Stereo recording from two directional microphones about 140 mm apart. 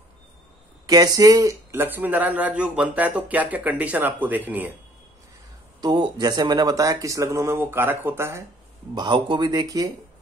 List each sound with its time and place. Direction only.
0.8 s speech: 25° right (ahead or behind); by 4.7 s 10° right (ahead or behind)
5.8 s speech: 30° right (ahead or behind)
8.9 s speech: 35° right (ahead or behind)